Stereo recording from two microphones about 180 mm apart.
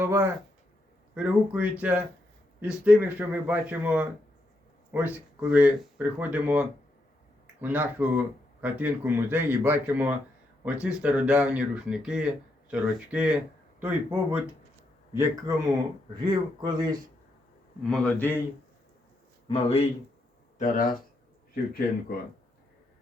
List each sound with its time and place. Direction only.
0.0 s speech: 10° right (ahead or behind)
17.8 s a man's voice: 5° left (ahead or behind)
19.5 s speech: 35° left (ahead or behind)
20.6 s speech: 50° left (ahead or behind)